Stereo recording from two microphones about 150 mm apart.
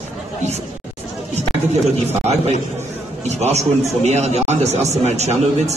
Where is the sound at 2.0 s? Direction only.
45° right (ahead or behind).